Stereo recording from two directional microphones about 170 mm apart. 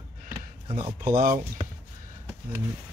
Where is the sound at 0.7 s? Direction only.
35° right (ahead or behind).